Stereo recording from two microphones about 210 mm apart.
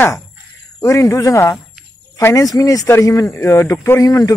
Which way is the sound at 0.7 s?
15° left (ahead or behind).